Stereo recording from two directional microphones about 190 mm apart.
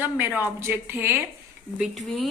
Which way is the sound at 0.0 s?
10° right (ahead or behind).